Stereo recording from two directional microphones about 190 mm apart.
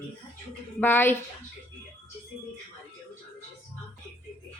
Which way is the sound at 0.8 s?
10° left (ahead or behind).